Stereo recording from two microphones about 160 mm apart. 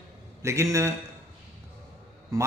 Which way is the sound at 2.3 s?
20° right (ahead or behind).